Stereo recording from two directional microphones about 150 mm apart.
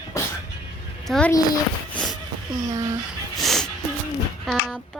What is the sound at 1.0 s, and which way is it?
Speech, 5° left (ahead or behind).